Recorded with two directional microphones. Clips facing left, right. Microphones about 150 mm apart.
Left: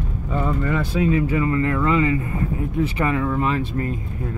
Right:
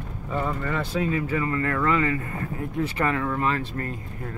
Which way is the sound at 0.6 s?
10° left (ahead or behind).